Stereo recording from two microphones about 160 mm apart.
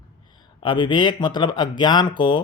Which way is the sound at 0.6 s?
30° left (ahead or behind).